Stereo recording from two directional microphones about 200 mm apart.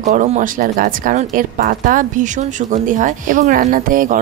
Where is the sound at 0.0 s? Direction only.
35° right (ahead or behind).